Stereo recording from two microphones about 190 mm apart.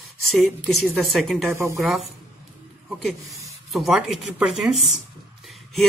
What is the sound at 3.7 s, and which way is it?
A woman's voice, centre (ahead or behind).